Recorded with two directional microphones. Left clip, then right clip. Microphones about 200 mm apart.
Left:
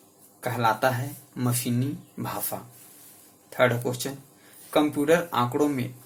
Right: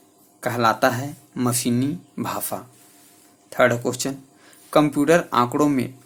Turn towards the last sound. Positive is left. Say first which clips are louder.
# right 5 dB
turn(degrees=-45)  # may be behind; listen again after turning